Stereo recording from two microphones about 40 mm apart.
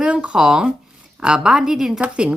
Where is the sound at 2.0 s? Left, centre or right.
Right.